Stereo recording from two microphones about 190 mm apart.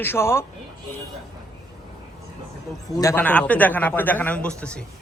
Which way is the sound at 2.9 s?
15° left (ahead or behind).